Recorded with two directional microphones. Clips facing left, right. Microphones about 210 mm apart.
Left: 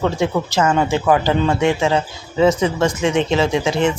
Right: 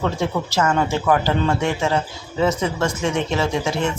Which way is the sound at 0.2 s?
15° left (ahead or behind).